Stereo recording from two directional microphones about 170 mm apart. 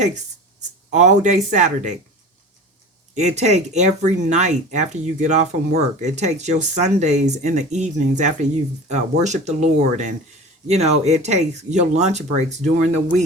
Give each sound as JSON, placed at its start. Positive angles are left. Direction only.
{"t": 0.9, "sound": "speech", "side_deg": -45}
{"t": 3.2, "sound": "speech", "side_deg": -40}